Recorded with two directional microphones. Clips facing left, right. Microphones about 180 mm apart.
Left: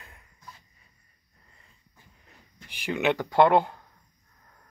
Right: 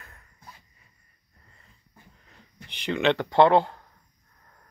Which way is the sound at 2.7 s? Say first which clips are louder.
Right 2 dB; 10° left (ahead or behind).